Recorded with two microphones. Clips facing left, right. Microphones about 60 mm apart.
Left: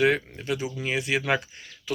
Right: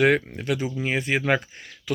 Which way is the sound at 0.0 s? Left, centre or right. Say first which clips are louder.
Right 3 dB; right.